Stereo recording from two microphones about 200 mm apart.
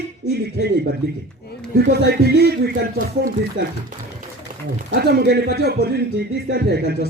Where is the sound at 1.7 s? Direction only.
50° right (ahead or behind).